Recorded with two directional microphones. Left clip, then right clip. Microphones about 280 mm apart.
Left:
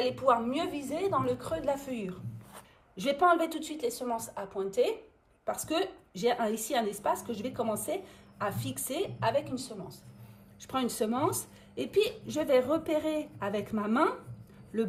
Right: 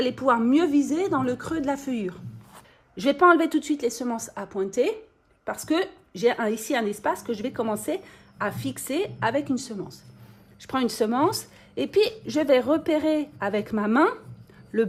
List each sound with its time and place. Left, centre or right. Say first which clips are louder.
0.0 s a woman's voice: right 4 dB; right